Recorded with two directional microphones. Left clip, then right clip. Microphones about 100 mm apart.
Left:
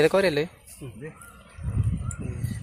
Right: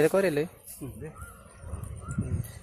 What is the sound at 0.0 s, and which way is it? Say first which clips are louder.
Speech: left 3 dB; 10° left (ahead or behind).